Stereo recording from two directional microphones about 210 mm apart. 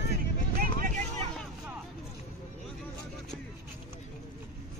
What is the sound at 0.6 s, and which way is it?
Vehicle, 40° right (ahead or behind).